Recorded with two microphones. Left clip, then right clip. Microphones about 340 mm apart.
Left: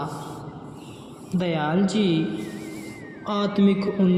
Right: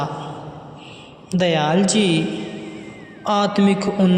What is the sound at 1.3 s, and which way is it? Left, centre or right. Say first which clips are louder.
Speech: right 7 dB; right.